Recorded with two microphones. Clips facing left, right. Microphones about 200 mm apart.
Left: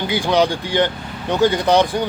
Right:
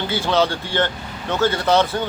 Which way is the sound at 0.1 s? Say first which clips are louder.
Left 3 dB; 15° left (ahead or behind).